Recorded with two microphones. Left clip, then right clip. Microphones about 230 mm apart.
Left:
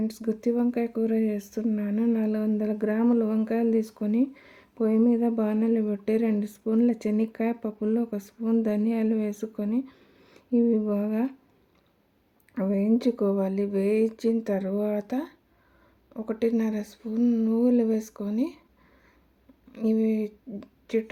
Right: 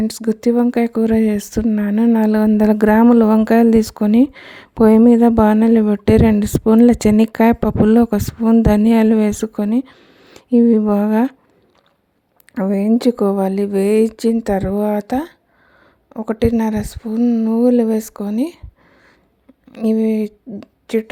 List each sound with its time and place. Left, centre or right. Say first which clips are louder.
0.0 s speech: right 10 dB; right
12.5 s speech: right 9 dB; right
19.7 s a woman's voice: right 9 dB; right